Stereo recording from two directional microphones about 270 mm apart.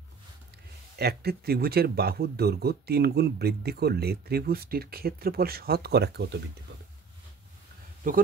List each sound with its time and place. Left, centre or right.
0.9 s speech: right
8.0 s speech: right